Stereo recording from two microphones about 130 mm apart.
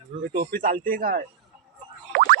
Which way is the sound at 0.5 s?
90° right.